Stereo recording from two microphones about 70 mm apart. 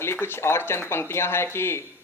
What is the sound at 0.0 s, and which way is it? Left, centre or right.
Speech, left.